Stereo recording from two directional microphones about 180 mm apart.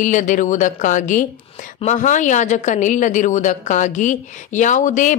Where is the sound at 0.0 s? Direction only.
45° left (ahead or behind).